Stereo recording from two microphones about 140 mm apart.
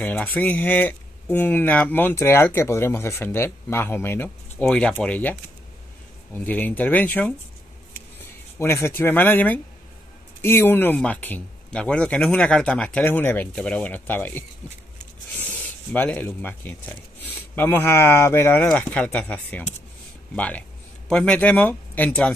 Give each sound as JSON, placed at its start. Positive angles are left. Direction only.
{"t": 0.0, "sound": "speech", "side_deg": 10}
{"t": 8.5, "sound": "speech", "side_deg": 20}